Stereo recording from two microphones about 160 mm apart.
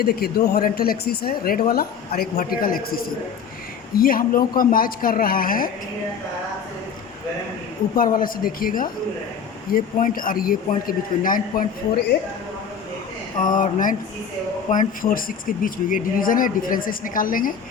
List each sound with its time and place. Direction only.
0.0 s a woman's voice: 75° left (ahead or behind)
7.9 s speech: 60° left (ahead or behind)
13.4 s speech: 55° left (ahead or behind)